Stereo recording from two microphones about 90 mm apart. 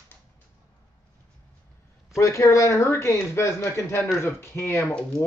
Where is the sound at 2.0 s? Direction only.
35° left (ahead or behind).